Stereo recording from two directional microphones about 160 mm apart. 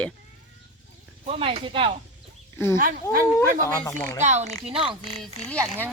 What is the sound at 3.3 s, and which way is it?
Speech, 15° left (ahead or behind).